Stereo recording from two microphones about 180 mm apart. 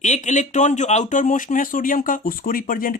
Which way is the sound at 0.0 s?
40° left (ahead or behind).